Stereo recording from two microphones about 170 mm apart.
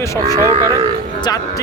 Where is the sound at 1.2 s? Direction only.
25° left (ahead or behind).